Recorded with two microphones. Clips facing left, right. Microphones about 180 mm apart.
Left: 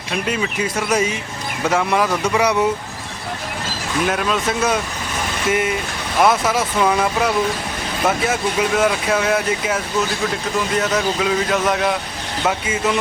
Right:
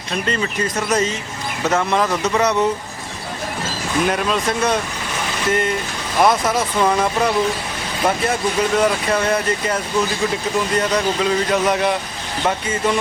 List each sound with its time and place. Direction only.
0.1 s speech: 5° left (ahead or behind)
4.0 s speech: centre (ahead or behind)